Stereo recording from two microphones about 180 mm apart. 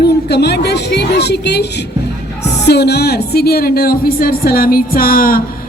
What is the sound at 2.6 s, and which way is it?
A woman's voice, 65° left (ahead or behind).